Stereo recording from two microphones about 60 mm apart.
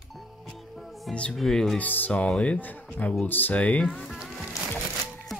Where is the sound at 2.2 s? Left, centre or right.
Centre.